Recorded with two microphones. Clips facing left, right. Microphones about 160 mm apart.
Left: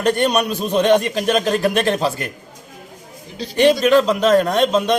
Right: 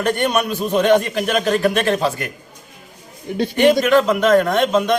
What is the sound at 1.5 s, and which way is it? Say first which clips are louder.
Speech: right 1 dB; 35° left (ahead or behind).